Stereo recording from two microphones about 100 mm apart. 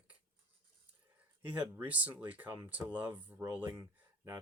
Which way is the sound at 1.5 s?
15° right (ahead or behind).